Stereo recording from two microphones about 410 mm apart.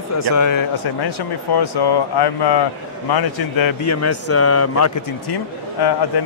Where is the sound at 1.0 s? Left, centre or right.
Left.